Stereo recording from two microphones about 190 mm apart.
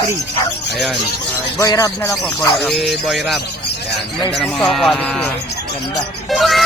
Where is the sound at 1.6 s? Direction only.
20° left (ahead or behind).